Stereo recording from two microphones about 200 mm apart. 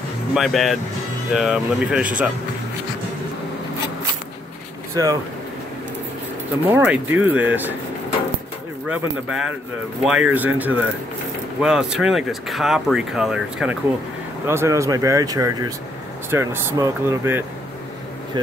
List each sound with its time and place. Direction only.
0.3 s speech: centre (ahead or behind)
5.0 s speech: 20° right (ahead or behind)
6.7 s speech: 10° right (ahead or behind)
8.8 s speech: 5° right (ahead or behind)